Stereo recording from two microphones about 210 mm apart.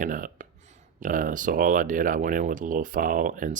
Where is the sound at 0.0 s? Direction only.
40° right (ahead or behind).